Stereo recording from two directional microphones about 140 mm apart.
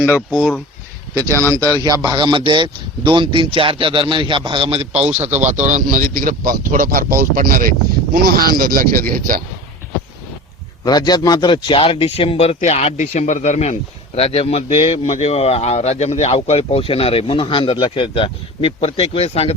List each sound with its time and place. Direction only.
0.3 s speech: 5° right (ahead or behind)
1.3 s speech: 15° left (ahead or behind)
1.8 s speech: 30° right (ahead or behind); by 9.4 s 80° right
10.8 s a man's voice: 30° left (ahead or behind); by 19.5 s 45° left (ahead or behind)